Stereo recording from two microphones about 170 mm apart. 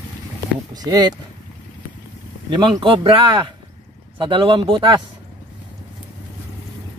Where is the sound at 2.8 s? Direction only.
30° right (ahead or behind).